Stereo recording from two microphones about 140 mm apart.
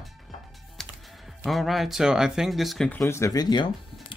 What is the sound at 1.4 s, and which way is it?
Speech, centre (ahead or behind).